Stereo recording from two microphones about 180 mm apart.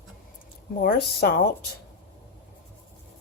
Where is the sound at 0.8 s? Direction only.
55° left (ahead or behind).